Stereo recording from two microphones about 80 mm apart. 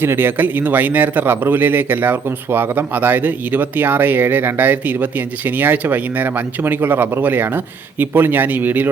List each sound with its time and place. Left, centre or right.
0.0 s speech: right